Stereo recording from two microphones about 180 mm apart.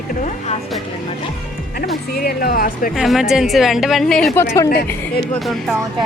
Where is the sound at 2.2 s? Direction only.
55° left (ahead or behind).